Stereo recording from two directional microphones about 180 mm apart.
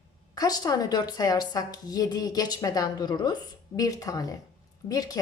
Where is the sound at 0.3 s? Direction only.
20° left (ahead or behind).